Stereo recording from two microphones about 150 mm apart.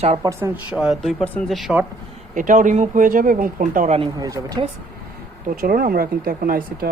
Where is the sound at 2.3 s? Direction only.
60° right (ahead or behind).